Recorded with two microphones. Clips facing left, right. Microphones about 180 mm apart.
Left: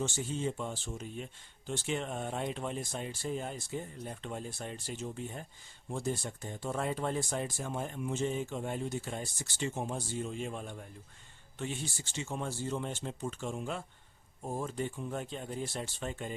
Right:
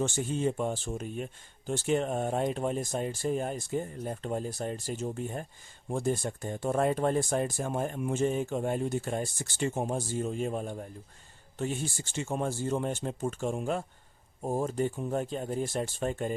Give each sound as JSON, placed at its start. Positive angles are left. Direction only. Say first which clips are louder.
{"t": 0.0, "sound": "speech", "louder": "right 5 dB", "side_deg": -55}